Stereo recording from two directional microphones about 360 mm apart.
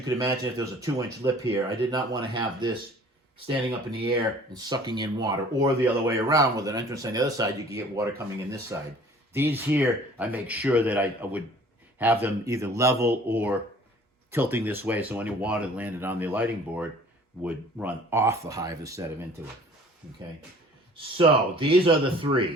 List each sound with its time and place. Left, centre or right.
0.0 s speech: centre
20.9 s speech: centre